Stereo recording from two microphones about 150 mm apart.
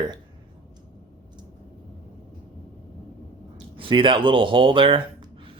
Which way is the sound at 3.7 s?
35° right (ahead or behind).